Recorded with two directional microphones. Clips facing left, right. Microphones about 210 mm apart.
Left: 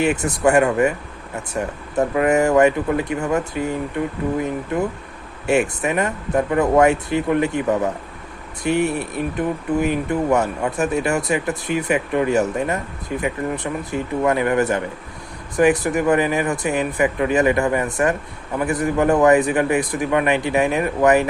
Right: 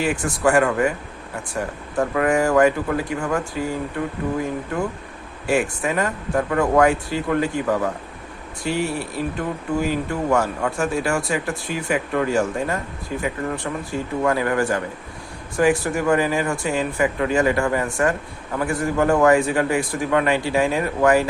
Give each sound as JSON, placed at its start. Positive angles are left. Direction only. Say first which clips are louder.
{"t": 0.0, "sound": "speech", "louder": "left 3 dB", "side_deg": 20}